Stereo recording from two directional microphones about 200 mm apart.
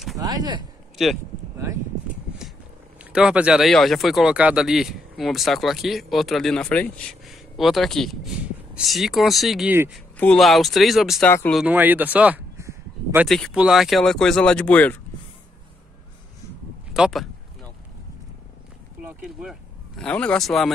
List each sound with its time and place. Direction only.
0.2 s a sound: 20° right (ahead or behind)
3.0 s speech: 5° right (ahead or behind)
11.6 s speech: 10° right (ahead or behind)
13.3 s speech: centre (ahead or behind)
16.9 s speech: centre (ahead or behind)
19.0 s speech: 5° right (ahead or behind)
20.0 s speech: 5° left (ahead or behind)